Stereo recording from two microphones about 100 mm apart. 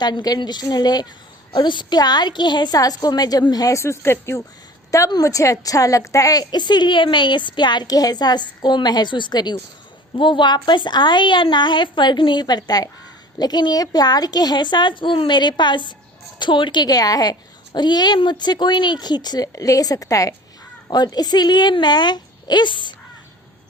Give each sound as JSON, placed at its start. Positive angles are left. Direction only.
{"t": 0.0, "sound": "a woman's voice", "side_deg": 45}